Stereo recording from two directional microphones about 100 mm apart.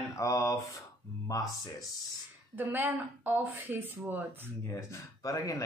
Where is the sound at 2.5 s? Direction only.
20° right (ahead or behind).